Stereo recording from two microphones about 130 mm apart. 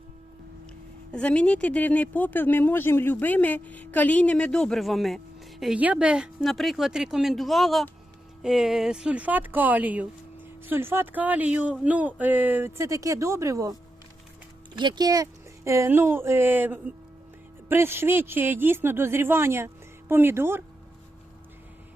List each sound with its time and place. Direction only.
1.1 s speech: 10° left (ahead or behind); by 13.7 s 25° right (ahead or behind)
14.8 s speech: 35° right (ahead or behind); by 20.7 s 20° right (ahead or behind)